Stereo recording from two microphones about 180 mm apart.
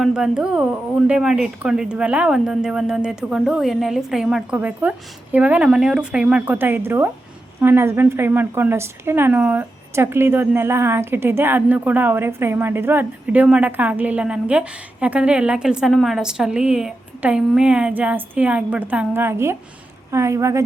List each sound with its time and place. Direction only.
0.0 s a woman's voice: 5° right (ahead or behind)